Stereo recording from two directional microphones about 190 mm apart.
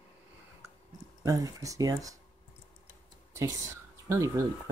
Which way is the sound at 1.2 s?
20° right (ahead or behind).